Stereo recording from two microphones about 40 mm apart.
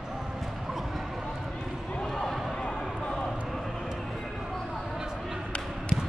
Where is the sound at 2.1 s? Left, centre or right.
Centre.